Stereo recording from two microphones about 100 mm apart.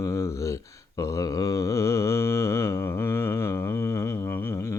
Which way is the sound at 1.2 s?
35° left (ahead or behind).